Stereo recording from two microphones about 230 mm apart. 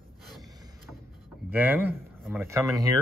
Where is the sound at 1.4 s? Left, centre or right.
Centre.